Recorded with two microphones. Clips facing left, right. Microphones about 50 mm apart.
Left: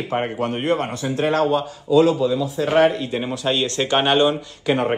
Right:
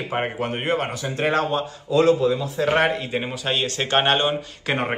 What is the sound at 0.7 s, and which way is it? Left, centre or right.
Speech, right.